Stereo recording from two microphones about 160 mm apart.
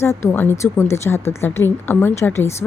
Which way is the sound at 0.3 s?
15° left (ahead or behind).